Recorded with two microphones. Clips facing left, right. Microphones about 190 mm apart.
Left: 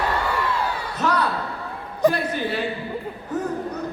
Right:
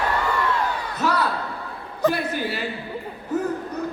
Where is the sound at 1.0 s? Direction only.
10° right (ahead or behind).